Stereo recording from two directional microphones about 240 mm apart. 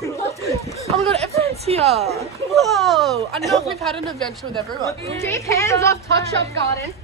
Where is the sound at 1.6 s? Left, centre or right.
Right.